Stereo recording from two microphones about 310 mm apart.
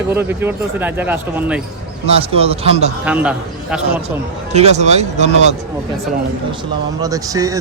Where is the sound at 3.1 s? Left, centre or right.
Centre.